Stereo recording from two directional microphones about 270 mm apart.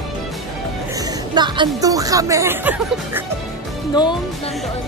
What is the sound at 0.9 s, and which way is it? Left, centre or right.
Speech, centre.